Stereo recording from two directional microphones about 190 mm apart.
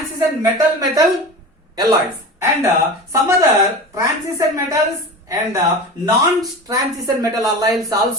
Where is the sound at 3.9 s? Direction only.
15° right (ahead or behind).